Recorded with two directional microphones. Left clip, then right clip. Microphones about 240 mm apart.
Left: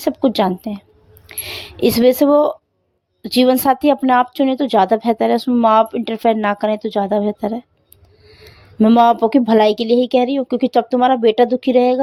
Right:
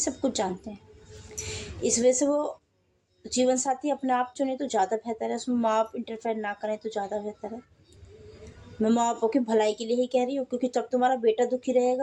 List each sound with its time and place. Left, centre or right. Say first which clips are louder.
0.0 s a woman's voice: left 12 dB; left
8.8 s a woman's voice: left 13 dB; left